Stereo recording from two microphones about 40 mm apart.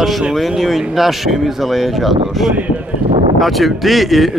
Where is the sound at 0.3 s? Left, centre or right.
Centre.